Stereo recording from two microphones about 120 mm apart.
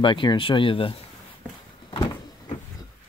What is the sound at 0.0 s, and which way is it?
Speech, 40° left (ahead or behind).